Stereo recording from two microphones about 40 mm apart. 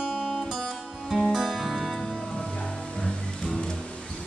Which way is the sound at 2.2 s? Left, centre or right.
Centre.